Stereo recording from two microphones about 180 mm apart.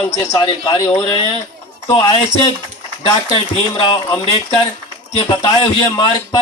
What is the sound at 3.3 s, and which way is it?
Speech, 25° left (ahead or behind).